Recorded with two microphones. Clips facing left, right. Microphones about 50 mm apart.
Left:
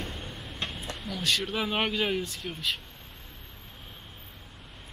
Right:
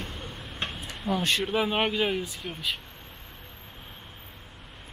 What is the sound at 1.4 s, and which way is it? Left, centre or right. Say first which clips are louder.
Speech: right 3 dB; centre.